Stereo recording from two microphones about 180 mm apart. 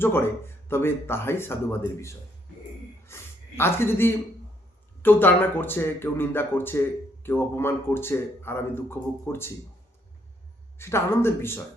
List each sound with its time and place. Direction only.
0.0 s a woman's voice: 10° left (ahead or behind)
10.8 s speech: 15° left (ahead or behind)